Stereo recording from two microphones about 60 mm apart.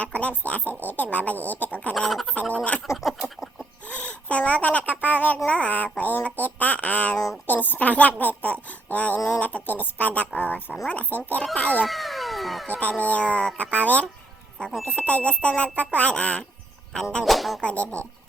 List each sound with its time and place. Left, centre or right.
0.0 s speech: left
2.0 s music: centre
2.3 s speech: left
2.8 s a sound: centre
3.8 s speech: left
11.9 s a sound: centre
12.6 s speech: left
16.9 s music: centre
17.2 s music: centre
17.6 s speech: centre